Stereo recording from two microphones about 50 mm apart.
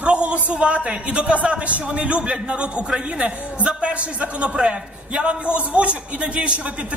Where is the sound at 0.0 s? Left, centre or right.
Right.